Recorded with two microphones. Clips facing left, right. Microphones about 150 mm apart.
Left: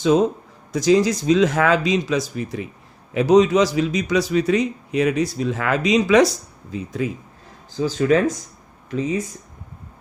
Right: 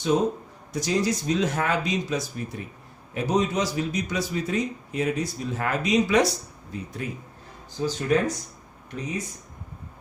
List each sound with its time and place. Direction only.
0.7 s a man's voice: 90° left